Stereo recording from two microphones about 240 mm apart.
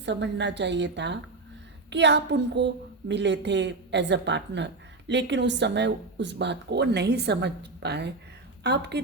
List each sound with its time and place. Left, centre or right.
0.0 s a woman's voice: right